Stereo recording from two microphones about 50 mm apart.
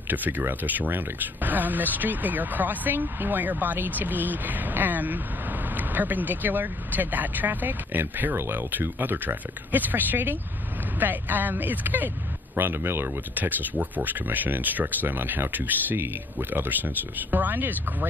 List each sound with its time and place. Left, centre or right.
0.1 s speech: right
12.5 s speech: right
13.3 s speech: right